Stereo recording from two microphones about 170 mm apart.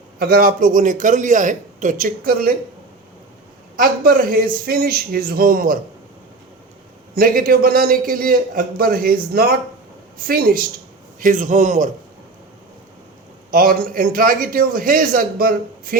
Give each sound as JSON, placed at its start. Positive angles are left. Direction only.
{"t": 0.2, "sound": "a man's voice", "side_deg": -60}
{"t": 3.8, "sound": "a man's voice", "side_deg": -60}
{"t": 7.2, "sound": "a man's voice", "side_deg": -60}
{"t": 11.2, "sound": "a man's voice", "side_deg": -50}
{"t": 13.5, "sound": "a man's voice", "side_deg": -60}